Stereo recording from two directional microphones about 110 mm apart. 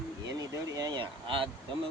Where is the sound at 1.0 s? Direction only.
50° right (ahead or behind).